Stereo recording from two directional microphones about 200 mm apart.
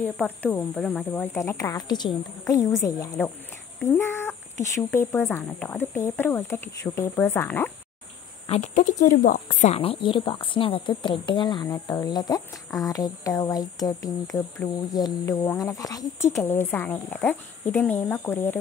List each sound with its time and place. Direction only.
0.0 s speech: 10° left (ahead or behind)
8.5 s speech: 40° left (ahead or behind); by 18.6 s 10° left (ahead or behind)